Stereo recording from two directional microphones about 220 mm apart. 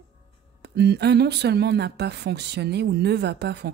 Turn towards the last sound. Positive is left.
turn(degrees=-50)  # may be behind; listen again after turning